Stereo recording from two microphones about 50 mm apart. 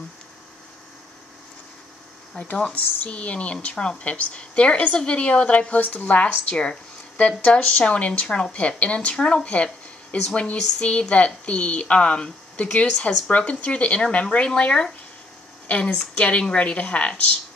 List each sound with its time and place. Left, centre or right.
2.3 s a woman's voice: left
3.7 s speech: centre
4.0 s a woman's voice: left
16.2 s a woman's voice: left